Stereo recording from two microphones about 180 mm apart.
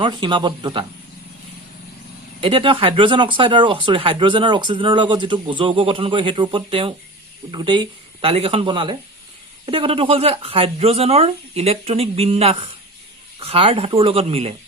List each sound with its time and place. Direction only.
0.0 s speech: 25° right (ahead or behind)
2.4 s speech: 30° right (ahead or behind)